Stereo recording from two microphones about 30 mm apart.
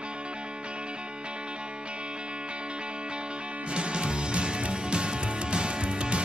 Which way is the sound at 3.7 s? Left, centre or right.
Right.